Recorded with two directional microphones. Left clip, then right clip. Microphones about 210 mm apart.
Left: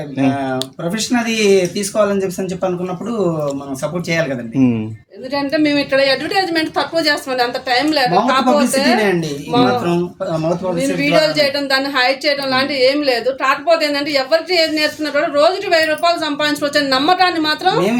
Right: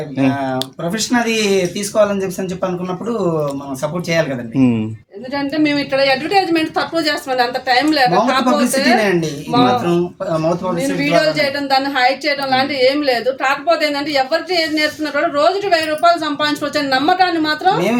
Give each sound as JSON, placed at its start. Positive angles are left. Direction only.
{"t": 0.2, "sound": "speech", "side_deg": -5}
{"t": 4.1, "sound": "speech", "side_deg": -5}
{"t": 5.3, "sound": "speech", "side_deg": 25}
{"t": 9.6, "sound": "speech", "side_deg": -5}
{"t": 11.2, "sound": "a woman's voice", "side_deg": 25}